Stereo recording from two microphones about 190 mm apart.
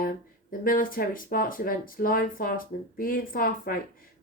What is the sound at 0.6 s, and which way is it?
Speech, 50° left (ahead or behind).